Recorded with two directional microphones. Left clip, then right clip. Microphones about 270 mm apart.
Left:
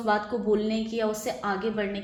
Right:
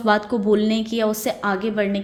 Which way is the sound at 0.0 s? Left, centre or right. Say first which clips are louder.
Right 7 dB; right.